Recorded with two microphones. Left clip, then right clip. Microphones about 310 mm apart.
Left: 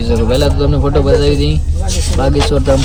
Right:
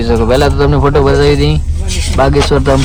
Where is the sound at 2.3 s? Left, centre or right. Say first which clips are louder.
Even; right.